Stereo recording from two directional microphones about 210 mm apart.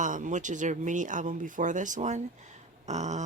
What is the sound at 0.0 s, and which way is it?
Speech, 35° right (ahead or behind).